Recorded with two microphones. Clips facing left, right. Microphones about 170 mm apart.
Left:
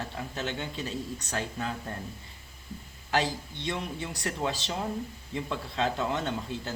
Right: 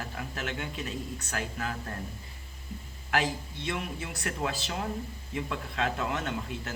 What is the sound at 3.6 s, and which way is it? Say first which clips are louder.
Speech: left 1 dB; 30° left (ahead or behind).